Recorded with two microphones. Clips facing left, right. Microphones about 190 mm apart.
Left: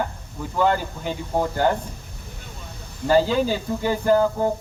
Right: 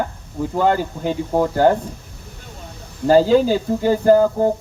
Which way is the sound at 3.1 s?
40° right (ahead or behind).